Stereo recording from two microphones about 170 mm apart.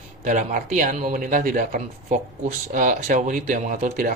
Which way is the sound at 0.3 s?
50° right (ahead or behind).